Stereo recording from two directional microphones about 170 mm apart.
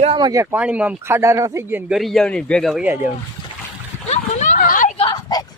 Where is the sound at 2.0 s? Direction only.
Centre (ahead or behind).